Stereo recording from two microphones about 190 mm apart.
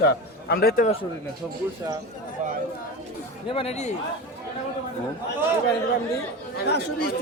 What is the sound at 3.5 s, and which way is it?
Speech, 35° left (ahead or behind).